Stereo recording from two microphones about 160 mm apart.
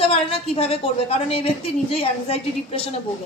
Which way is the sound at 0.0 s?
35° left (ahead or behind).